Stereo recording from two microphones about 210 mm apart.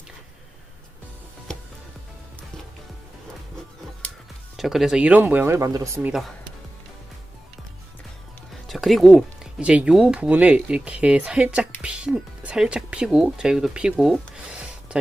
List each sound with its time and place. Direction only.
4.5 s speech: centre (ahead or behind)
8.6 s speech: centre (ahead or behind)